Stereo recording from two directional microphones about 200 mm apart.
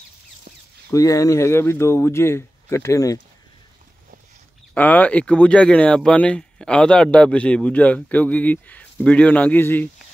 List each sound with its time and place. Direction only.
0.9 s speech: 15° left (ahead or behind)
4.7 s speech: 10° left (ahead or behind)